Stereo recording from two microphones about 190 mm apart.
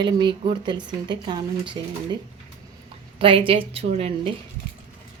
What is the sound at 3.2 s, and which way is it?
A woman's voice, 25° right (ahead or behind).